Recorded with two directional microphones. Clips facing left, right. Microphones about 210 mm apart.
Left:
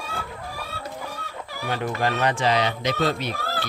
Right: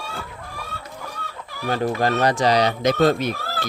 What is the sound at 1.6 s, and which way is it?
Speech, 40° right (ahead or behind).